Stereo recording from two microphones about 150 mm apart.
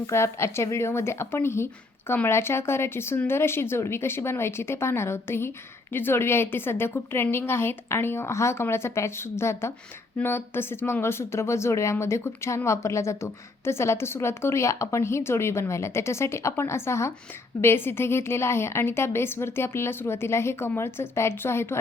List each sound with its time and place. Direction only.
0.1 s speech: 20° left (ahead or behind)